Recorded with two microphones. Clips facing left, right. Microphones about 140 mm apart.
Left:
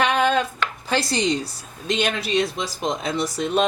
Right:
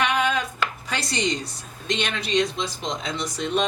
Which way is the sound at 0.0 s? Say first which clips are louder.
Left 4 dB; 30° left (ahead or behind).